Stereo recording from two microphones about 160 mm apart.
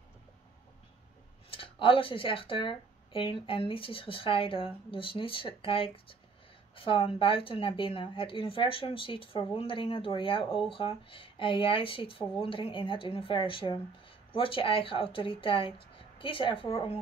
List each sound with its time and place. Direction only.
1.5 s speech: 35° left (ahead or behind)